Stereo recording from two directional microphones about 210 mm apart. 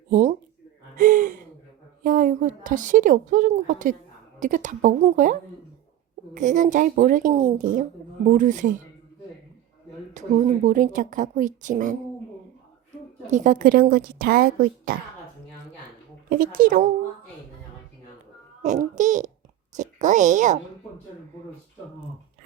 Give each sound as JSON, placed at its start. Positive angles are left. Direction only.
{"t": 0.1, "sound": "speech", "side_deg": -40}
{"t": 0.9, "sound": "gasp", "side_deg": -40}
{"t": 2.0, "sound": "a woman's voice", "side_deg": -40}
{"t": 10.2, "sound": "a woman's voice", "side_deg": -35}
{"t": 13.3, "sound": "a woman's voice", "side_deg": -40}
{"t": 16.3, "sound": "a woman's voice", "side_deg": -40}
{"t": 18.6, "sound": "a woman's voice", "side_deg": -35}